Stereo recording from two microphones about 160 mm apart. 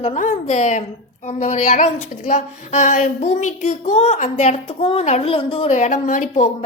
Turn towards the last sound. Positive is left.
turn(degrees=55)  # may be behind; listen again after turning